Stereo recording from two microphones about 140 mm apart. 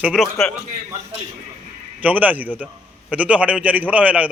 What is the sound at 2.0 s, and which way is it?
Speech, 10° right (ahead or behind).